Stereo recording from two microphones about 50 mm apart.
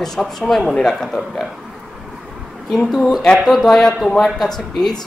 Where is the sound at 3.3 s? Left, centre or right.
Centre.